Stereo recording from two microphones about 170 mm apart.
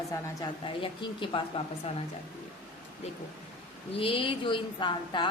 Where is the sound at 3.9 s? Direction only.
30° left (ahead or behind).